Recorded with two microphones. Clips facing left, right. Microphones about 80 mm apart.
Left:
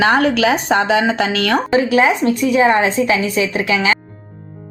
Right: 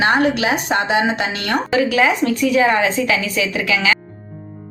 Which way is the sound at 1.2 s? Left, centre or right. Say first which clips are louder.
Left 4 dB; left.